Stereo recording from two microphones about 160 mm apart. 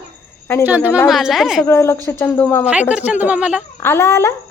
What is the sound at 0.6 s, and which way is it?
A woman's voice, 10° right (ahead or behind).